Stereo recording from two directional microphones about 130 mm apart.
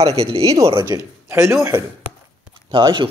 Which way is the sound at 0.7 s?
30° right (ahead or behind).